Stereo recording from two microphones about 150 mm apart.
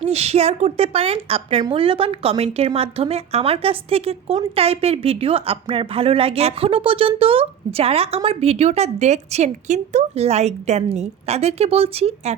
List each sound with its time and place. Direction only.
0.0 s a woman's voice: 45° right (ahead or behind)